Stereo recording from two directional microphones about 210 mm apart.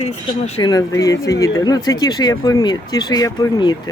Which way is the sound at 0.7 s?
15° left (ahead or behind).